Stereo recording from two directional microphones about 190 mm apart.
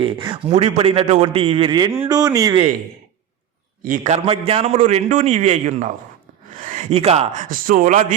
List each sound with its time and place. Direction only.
0.0 s a man's voice: 25° right (ahead or behind)
3.8 s a man's voice: 35° right (ahead or behind)
7.4 s speech: 45° right (ahead or behind)